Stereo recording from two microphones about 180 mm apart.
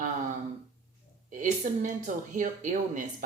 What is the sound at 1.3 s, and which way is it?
Speech, 45° right (ahead or behind).